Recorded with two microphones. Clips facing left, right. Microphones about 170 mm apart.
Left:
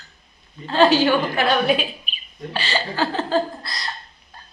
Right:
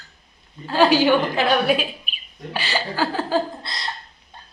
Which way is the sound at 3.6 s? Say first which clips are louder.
Even; 25° right (ahead or behind).